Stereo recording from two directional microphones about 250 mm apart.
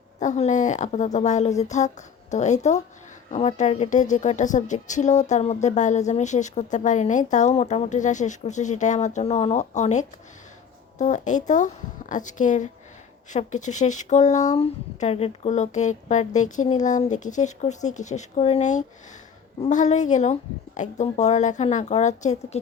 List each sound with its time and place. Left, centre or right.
0.2 s a woman's voice: left